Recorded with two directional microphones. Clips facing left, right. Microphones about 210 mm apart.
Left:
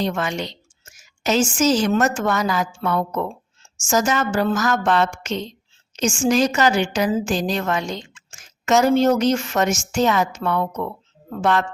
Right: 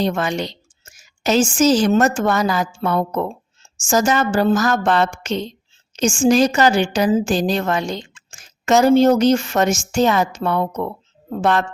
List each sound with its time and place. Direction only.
0.0 s a woman's voice: 35° right (ahead or behind)